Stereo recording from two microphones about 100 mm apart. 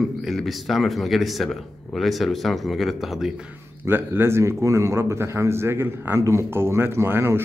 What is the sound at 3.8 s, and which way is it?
A man's voice, 20° right (ahead or behind).